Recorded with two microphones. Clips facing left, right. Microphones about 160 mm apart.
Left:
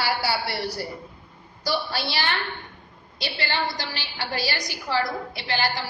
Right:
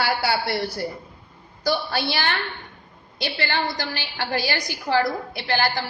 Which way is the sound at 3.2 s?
55° right (ahead or behind).